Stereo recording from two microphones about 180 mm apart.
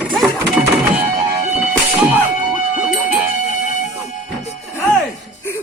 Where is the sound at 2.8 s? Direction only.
5° right (ahead or behind).